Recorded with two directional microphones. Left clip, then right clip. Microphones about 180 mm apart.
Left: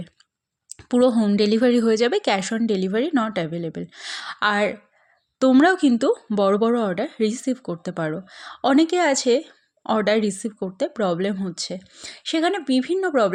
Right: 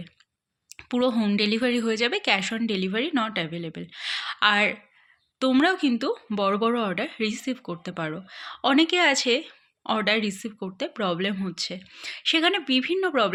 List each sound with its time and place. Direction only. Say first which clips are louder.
0.7 s speech: left 6 dB; 45° left (ahead or behind)